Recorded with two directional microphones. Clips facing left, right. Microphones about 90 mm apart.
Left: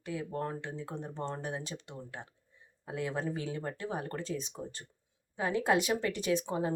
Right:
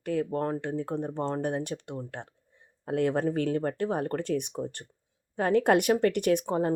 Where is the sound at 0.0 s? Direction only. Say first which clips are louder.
Right 8 dB; 55° right (ahead or behind).